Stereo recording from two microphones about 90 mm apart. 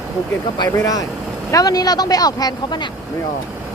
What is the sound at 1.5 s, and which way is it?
Speech, 40° left (ahead or behind).